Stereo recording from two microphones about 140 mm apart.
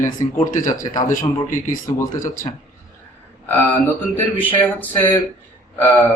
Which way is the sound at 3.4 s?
15° left (ahead or behind).